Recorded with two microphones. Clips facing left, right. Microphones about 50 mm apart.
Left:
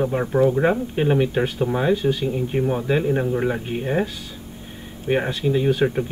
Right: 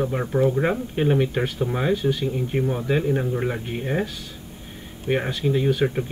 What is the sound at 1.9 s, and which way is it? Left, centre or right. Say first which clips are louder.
Speech: left 2 dB; left.